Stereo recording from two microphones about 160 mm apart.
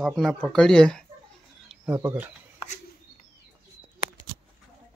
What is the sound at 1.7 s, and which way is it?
Speech, 10° right (ahead or behind).